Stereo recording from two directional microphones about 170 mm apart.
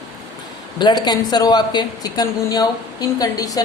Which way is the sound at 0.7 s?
25° left (ahead or behind).